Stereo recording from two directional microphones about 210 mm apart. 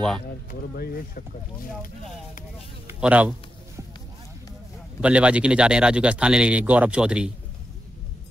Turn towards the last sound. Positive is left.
turn(degrees=-5)  # may be behind; listen again after turning